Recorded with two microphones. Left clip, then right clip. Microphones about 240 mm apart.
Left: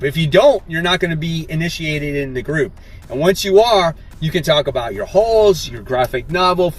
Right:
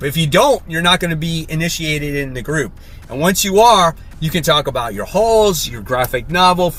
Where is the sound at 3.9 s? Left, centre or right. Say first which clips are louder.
Right 1 dB; centre.